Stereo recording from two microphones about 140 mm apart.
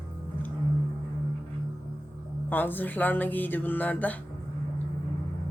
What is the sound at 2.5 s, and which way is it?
Music, 15° left (ahead or behind).